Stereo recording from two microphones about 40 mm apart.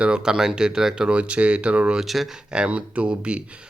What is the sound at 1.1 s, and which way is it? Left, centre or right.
Speech, right.